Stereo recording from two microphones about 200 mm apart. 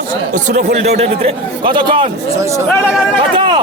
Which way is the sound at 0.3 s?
35° right (ahead or behind).